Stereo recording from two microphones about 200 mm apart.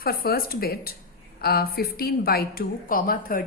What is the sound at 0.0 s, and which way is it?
A woman's voice, 50° left (ahead or behind).